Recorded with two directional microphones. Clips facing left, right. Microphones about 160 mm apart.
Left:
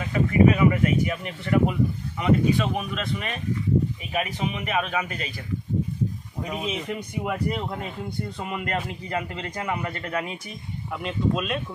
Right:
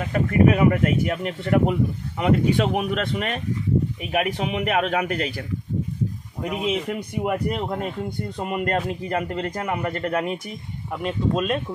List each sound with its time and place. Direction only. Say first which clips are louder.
0.0 s speech: right 1 dB; 55° right (ahead or behind)
6.9 s a man's voice: right 4 dB; 50° right (ahead or behind)